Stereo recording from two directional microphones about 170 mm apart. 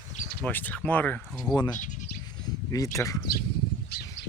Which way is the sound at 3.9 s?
70° left (ahead or behind).